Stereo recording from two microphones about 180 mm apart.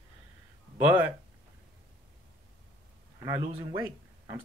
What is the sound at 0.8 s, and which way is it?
Speech, 10° right (ahead or behind).